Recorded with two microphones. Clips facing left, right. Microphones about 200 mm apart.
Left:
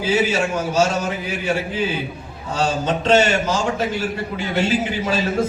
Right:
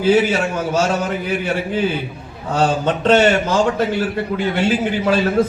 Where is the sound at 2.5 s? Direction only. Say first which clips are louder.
Right 3 dB; 55° right (ahead or behind).